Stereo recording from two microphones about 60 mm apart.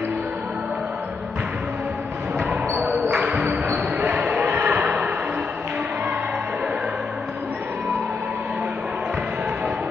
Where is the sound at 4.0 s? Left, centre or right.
Centre.